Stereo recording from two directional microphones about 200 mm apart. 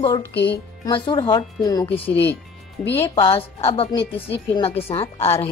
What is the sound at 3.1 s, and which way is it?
Speech, 30° left (ahead or behind).